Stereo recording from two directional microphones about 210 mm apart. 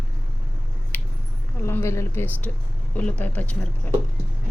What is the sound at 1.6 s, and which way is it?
Speech, 15° left (ahead or behind).